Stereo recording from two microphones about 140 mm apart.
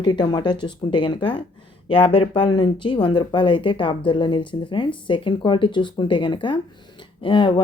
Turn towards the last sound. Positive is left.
turn(degrees=35)  # may be behind; listen again after turning